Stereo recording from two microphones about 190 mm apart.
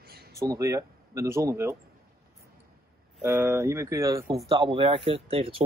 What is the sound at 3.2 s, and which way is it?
Speech, 10° right (ahead or behind).